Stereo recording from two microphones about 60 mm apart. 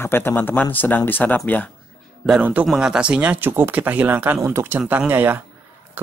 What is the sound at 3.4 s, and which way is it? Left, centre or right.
Speech, right.